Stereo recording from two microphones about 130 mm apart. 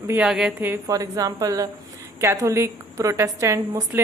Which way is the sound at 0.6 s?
20° right (ahead or behind).